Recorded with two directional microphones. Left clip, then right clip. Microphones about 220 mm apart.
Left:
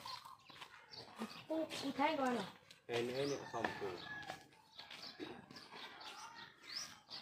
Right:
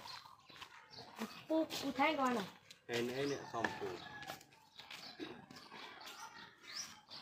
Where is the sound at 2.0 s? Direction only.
50° right (ahead or behind).